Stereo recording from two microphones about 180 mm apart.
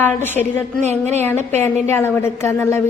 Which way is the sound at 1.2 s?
10° left (ahead or behind).